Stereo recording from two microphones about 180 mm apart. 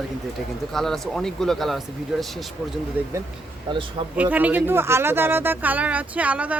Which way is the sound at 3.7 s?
30° right (ahead or behind).